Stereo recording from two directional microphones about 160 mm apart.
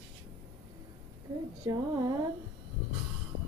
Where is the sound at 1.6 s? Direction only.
25° right (ahead or behind).